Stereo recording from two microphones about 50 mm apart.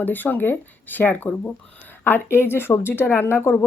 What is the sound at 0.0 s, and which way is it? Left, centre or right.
Speech, left.